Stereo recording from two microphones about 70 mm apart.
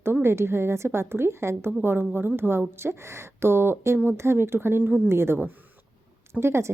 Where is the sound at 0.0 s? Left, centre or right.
Right.